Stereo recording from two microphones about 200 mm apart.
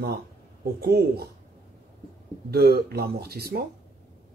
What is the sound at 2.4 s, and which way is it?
Speech, 50° right (ahead or behind).